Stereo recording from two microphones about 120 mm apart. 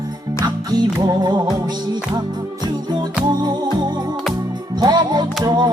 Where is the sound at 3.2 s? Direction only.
35° right (ahead or behind).